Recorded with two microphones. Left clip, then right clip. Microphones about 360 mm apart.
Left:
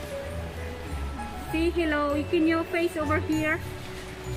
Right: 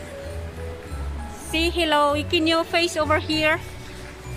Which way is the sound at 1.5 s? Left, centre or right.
Centre.